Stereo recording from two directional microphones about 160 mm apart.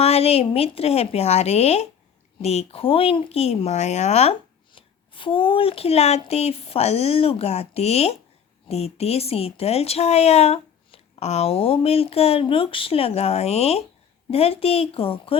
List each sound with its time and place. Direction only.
0.0 s speech: 40° left (ahead or behind)